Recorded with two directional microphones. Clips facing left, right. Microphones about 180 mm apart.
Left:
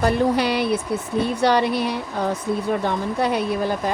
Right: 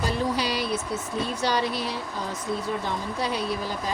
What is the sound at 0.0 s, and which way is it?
Speech, 60° left (ahead or behind).